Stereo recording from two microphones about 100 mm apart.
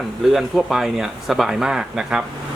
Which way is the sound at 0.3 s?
Centre (ahead or behind).